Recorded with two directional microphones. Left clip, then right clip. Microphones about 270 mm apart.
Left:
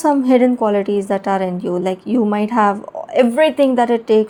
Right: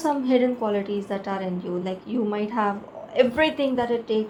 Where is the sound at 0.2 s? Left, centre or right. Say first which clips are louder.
Left 8 dB; left.